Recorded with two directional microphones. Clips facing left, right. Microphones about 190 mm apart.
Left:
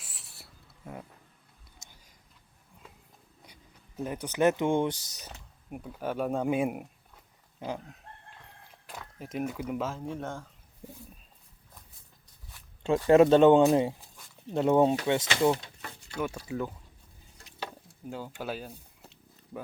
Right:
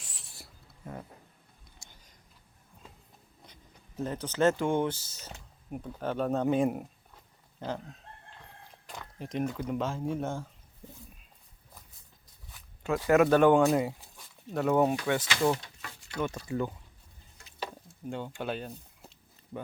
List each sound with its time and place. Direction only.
0.0 s writing: 5° left (ahead or behind)
1.8 s a sound: 20° left (ahead or behind)
3.4 s speech: 10° left (ahead or behind)
8.9 s speech: 5° left (ahead or behind)
10.0 s speech: 5° right (ahead or behind)
10.8 s a sound: 10° left (ahead or behind)
13.1 s speech: 25° left (ahead or behind)
16.2 s speech: 5° left (ahead or behind)
18.1 s speech: 5° left (ahead or behind)